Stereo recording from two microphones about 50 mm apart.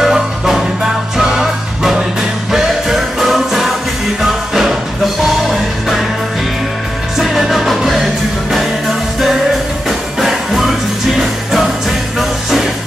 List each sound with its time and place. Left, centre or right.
0.0 s music: centre
7.2 s music: centre
9.8 s music: centre